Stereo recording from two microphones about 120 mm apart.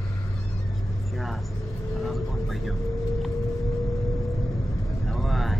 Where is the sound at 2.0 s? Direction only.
Centre (ahead or behind).